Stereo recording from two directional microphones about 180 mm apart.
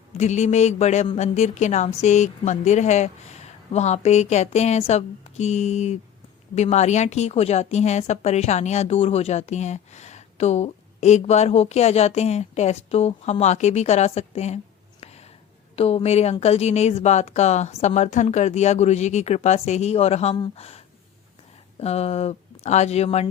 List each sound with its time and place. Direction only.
0.2 s a woman's voice: 40° left (ahead or behind)
15.0 s a sound: 35° left (ahead or behind)
15.7 s a woman's voice: 35° left (ahead or behind)